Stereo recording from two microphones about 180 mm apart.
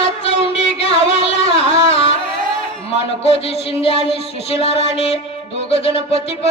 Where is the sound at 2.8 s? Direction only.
35° left (ahead or behind).